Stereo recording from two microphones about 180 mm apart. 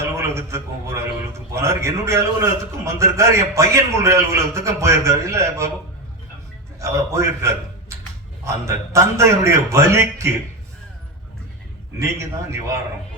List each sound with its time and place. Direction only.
0.0 s a sound: 15° right (ahead or behind)
1.5 s a man's voice: 15° right (ahead or behind)
6.7 s a man's voice: 15° right (ahead or behind)
11.9 s a man's voice: 15° right (ahead or behind)